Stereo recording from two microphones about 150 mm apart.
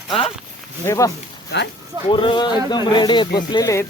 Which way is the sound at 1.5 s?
90° left.